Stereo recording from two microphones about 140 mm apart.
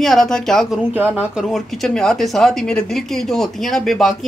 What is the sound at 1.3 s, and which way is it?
Speech, centre (ahead or behind).